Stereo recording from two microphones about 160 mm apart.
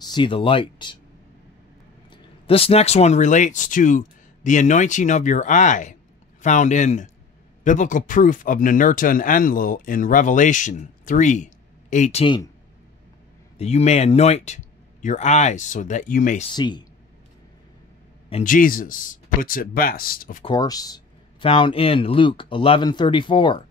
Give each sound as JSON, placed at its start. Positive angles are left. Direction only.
{"t": 0.0, "sound": "speech", "side_deg": 30}
{"t": 2.4, "sound": "speech", "side_deg": 35}
{"t": 13.6, "sound": "speech", "side_deg": 40}
{"t": 16.5, "sound": "speech", "side_deg": 30}
{"t": 18.4, "sound": "speech", "side_deg": 60}
{"t": 20.4, "sound": "speech", "side_deg": 25}